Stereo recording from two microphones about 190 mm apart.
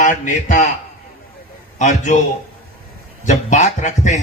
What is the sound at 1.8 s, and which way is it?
Speech, 40° left (ahead or behind).